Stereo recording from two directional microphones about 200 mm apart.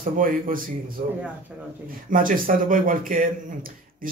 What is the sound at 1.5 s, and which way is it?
Speech, 5° right (ahead or behind).